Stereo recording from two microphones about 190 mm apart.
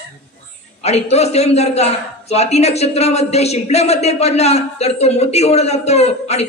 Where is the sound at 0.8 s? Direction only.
35° left (ahead or behind).